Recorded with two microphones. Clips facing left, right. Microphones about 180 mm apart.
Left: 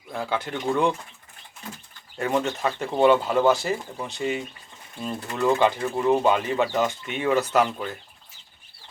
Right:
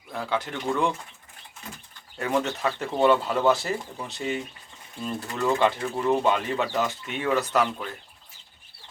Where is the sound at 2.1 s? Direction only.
Centre (ahead or behind).